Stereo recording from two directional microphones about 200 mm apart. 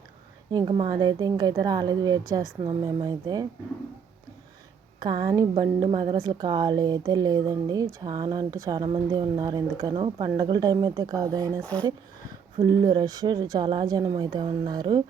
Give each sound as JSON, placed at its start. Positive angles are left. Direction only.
{"t": 0.5, "sound": "a woman's voice", "side_deg": -25}
{"t": 4.9, "sound": "a woman's voice", "side_deg": -20}
{"t": 12.8, "sound": "a woman's voice", "side_deg": -20}